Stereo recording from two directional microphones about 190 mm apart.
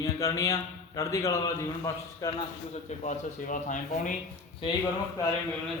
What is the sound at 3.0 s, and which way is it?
Speech, 40° left (ahead or behind).